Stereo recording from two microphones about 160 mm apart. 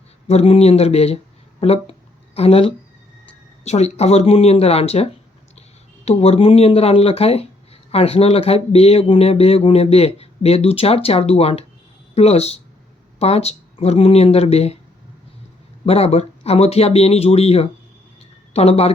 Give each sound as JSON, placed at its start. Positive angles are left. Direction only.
{"t": 0.3, "sound": "speech", "side_deg": 40}
{"t": 15.9, "sound": "speech", "side_deg": 40}